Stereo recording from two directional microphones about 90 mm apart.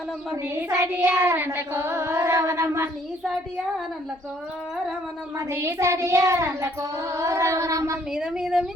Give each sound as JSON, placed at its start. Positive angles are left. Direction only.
{"t": 0.9, "sound": "child singing", "side_deg": -20}
{"t": 5.4, "sound": "child singing", "side_deg": -30}
{"t": 8.1, "sound": "a woman's voice", "side_deg": -5}